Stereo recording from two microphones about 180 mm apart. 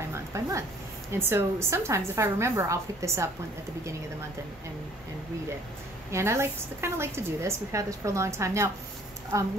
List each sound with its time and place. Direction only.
0.1 s a sound: 15° right (ahead or behind)
1.1 s a woman's voice: 15° right (ahead or behind)
6.1 s a woman's voice: 15° right (ahead or behind)